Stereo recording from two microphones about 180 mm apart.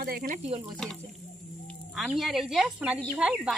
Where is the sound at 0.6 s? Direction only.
Centre (ahead or behind).